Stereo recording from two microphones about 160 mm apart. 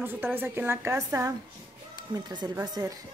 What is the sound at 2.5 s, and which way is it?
Speech, 20° right (ahead or behind).